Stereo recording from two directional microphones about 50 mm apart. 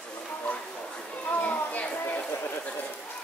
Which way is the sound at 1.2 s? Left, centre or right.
Left.